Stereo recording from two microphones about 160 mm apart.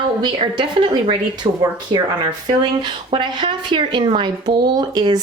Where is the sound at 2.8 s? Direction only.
30° right (ahead or behind).